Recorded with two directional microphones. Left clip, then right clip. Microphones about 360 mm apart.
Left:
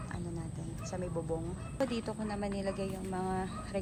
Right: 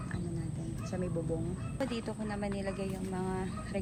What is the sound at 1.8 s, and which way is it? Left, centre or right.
Speech, centre.